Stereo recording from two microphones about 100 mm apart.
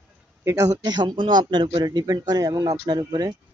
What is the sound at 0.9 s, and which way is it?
Speech, 50° right (ahead or behind).